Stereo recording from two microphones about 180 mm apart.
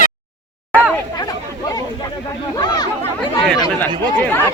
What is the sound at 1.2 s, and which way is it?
Chatter, 20° left (ahead or behind).